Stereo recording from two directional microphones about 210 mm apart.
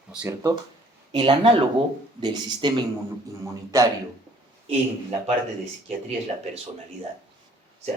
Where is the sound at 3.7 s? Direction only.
15° right (ahead or behind).